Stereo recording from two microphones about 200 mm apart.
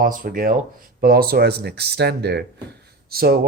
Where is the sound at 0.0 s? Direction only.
45° right (ahead or behind).